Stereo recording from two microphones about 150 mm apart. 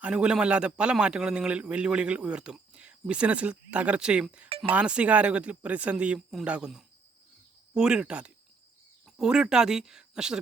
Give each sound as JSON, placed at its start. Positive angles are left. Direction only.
{"t": 0.0, "sound": "a man's voice", "side_deg": -5}
{"t": 4.4, "sound": "a sound", "side_deg": -40}
{"t": 4.7, "sound": "a man's voice", "side_deg": -10}